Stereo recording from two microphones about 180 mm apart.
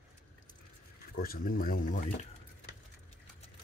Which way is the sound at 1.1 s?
55° left (ahead or behind).